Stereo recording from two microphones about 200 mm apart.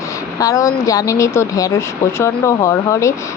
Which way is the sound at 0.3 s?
15° left (ahead or behind).